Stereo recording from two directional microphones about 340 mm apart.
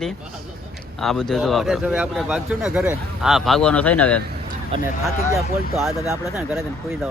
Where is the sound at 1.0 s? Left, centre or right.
Centre.